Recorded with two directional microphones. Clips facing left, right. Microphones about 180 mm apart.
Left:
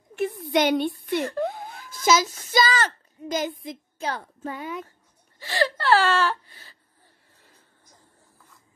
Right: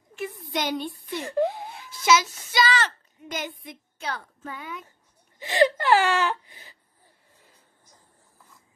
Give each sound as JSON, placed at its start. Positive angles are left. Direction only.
{"t": 0.1, "sound": "a sound", "side_deg": 65}
{"t": 2.0, "sound": "a child's voice", "side_deg": 40}
{"t": 5.4, "sound": "wail", "side_deg": -20}